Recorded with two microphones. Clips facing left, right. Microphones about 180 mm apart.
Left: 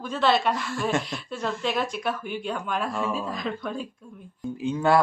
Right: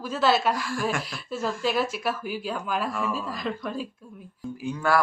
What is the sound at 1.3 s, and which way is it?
A woman's voice, centre (ahead or behind).